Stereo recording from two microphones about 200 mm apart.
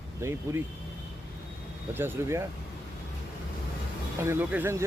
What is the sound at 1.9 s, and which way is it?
Speech, 10° right (ahead or behind).